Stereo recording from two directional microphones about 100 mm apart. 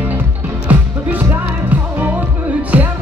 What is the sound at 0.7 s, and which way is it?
Music, 15° right (ahead or behind).